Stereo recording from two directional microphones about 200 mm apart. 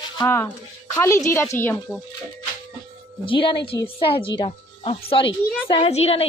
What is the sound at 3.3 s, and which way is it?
Speech, 25° left (ahead or behind).